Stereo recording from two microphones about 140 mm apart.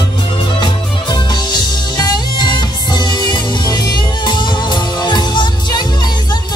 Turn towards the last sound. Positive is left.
turn(degrees=30)  # may be behind; listen again after turning